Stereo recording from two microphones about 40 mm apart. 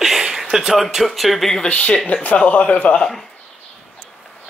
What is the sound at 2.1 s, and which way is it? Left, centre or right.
Speech, left.